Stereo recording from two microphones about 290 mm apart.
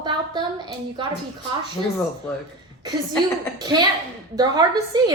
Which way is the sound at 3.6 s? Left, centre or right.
Centre.